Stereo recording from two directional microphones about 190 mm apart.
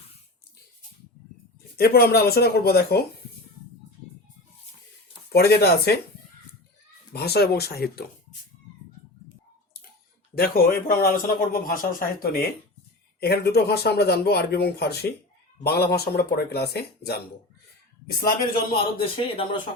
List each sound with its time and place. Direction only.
1.7 s speech: 55° left (ahead or behind)
5.3 s speech: 55° left (ahead or behind)
7.1 s speech: 55° left (ahead or behind)
10.3 s a man's voice: 50° left (ahead or behind)
18.7 s speech: 30° left (ahead or behind)